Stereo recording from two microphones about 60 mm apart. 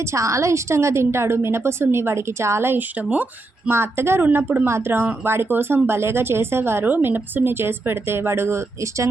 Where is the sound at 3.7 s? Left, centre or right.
Right.